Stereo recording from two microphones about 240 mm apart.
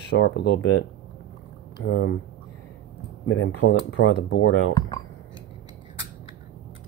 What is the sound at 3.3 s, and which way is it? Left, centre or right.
Speech, left.